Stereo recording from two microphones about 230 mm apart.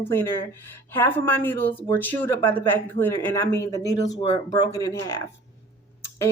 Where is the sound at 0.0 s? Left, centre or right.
Centre.